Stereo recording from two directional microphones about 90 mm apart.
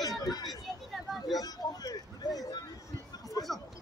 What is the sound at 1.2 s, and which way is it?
Music, 45° left (ahead or behind).